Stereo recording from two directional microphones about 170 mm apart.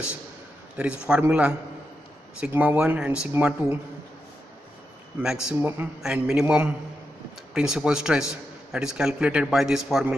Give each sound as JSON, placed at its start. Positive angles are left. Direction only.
{"t": 0.7, "sound": "a man's voice", "side_deg": -5}
{"t": 5.2, "sound": "a man's voice", "side_deg": -5}